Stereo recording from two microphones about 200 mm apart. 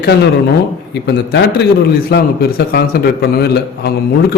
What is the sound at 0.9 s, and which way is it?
A man's voice, 60° left (ahead or behind).